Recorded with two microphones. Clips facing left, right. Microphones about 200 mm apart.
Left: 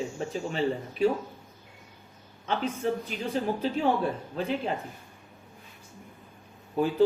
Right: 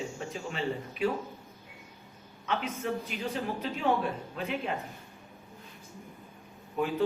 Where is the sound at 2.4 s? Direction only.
30° left (ahead or behind).